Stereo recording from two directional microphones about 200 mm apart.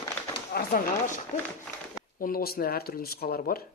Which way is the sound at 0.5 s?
45° left (ahead or behind).